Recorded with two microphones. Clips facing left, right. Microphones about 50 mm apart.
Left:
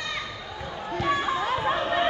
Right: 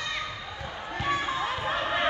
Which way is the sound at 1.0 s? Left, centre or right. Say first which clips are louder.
Left 3 dB; left.